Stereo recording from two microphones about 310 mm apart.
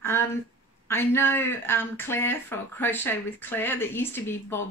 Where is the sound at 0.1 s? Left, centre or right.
Centre.